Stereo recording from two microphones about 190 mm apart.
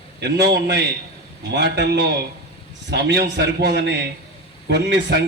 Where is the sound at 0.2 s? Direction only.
60° right (ahead or behind).